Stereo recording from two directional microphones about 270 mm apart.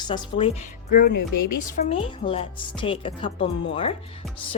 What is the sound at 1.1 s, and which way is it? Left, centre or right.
Speech, left.